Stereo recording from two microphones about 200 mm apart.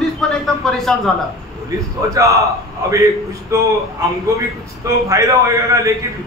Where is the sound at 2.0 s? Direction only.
15° right (ahead or behind).